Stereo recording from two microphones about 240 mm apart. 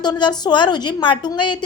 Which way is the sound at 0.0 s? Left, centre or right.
Centre.